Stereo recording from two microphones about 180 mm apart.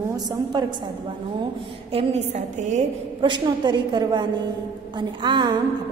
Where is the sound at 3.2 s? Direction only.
25° right (ahead or behind).